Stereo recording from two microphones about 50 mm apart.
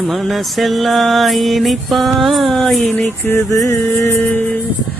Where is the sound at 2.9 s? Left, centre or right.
Left.